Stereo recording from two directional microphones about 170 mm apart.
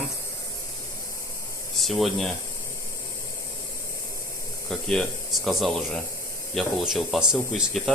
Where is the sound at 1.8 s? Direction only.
Centre (ahead or behind).